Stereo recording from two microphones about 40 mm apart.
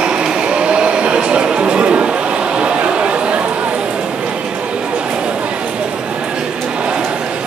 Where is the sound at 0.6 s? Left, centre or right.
Right.